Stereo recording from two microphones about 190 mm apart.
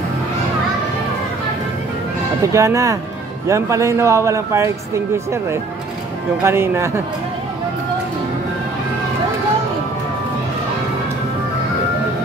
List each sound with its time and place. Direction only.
2.4 s speech: 15° right (ahead or behind)